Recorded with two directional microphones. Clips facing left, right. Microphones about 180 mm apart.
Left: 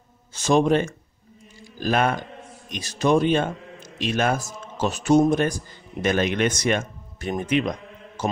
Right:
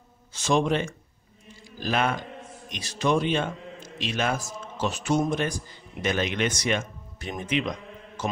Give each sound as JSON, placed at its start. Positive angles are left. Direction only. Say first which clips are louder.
{"t": 0.3, "sound": "speech", "louder": "left 5 dB", "side_deg": 45}